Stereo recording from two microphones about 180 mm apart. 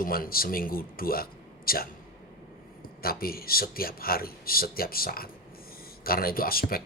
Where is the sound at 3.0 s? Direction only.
55° left (ahead or behind).